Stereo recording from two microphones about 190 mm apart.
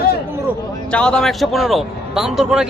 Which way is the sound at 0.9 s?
5° left (ahead or behind).